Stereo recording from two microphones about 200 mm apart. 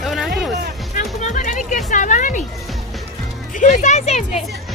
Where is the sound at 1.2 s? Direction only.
40° left (ahead or behind).